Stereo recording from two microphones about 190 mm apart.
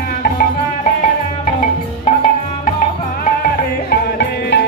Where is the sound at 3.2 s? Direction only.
50° left (ahead or behind).